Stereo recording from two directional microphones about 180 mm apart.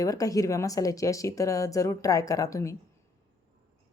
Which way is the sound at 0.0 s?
20° left (ahead or behind).